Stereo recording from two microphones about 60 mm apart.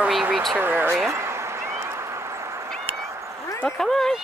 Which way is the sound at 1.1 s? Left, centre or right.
Right.